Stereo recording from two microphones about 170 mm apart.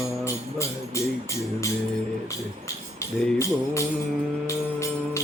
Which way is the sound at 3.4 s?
15° left (ahead or behind).